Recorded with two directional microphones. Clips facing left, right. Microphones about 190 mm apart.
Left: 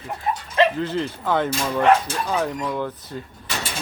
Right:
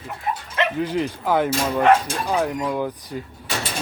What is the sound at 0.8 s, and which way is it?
Speech, 10° right (ahead or behind).